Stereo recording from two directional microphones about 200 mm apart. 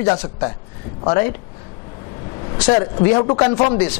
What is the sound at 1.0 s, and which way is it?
Speech, 25° left (ahead or behind).